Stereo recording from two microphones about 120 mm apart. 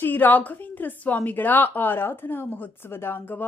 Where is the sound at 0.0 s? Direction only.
15° left (ahead or behind).